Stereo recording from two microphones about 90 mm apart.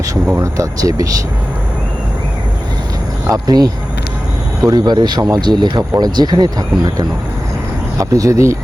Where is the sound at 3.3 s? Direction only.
45° right (ahead or behind).